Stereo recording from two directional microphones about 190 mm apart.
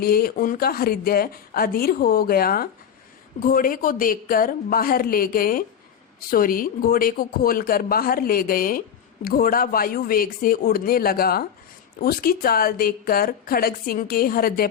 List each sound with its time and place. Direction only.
0.0 s a woman's voice: 50° left (ahead or behind)